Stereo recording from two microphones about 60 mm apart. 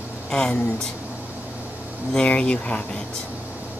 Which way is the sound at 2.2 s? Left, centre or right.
Centre.